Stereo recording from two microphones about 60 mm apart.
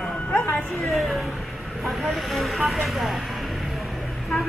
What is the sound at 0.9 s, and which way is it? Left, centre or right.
Speech, centre.